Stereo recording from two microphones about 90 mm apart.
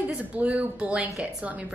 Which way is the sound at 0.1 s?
15° right (ahead or behind).